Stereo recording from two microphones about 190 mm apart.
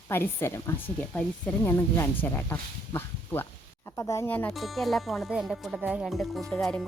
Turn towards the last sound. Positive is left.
turn(degrees=5)  # may be behind; listen again after turning